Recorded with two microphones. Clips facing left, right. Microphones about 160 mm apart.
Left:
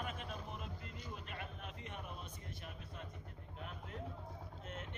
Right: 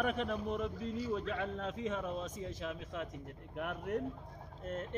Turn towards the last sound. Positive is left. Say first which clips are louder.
# right 8 dB
turn(degrees=-50)  # may be behind; listen again after turning